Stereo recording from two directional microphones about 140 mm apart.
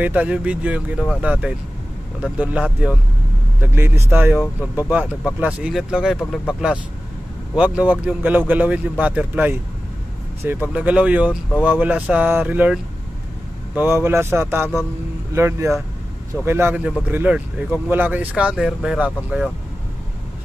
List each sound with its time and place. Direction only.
0.0 s speech: 10° right (ahead or behind)
3.6 s speech: 15° right (ahead or behind)
7.5 s speech: 10° right (ahead or behind)